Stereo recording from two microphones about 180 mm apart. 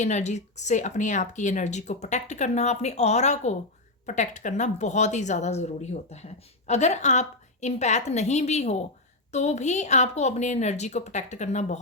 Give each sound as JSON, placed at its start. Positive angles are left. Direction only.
{"t": 0.0, "sound": "speech", "side_deg": 40}